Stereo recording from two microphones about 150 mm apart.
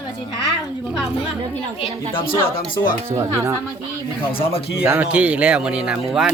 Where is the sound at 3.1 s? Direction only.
20° right (ahead or behind).